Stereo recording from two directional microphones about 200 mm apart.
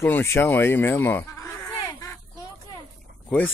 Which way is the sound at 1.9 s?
20° left (ahead or behind).